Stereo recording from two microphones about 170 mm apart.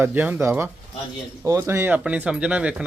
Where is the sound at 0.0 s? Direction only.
10° right (ahead or behind).